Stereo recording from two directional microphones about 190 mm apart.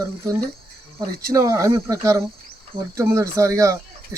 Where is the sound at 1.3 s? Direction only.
15° right (ahead or behind).